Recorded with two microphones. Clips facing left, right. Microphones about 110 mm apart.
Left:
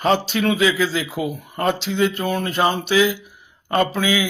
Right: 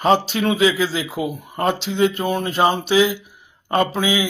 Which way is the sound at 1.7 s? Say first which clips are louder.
Right 1 dB; 35° right (ahead or behind).